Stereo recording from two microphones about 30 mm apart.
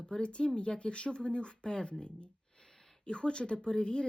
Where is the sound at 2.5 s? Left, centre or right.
Centre.